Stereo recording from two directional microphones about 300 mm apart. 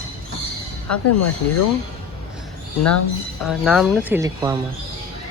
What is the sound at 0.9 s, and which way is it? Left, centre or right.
Speech, left.